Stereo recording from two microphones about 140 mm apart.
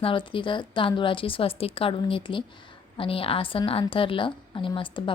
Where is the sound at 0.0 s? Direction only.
35° left (ahead or behind).